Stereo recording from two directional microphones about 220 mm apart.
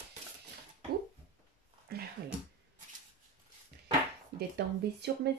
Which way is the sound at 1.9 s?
45° right (ahead or behind).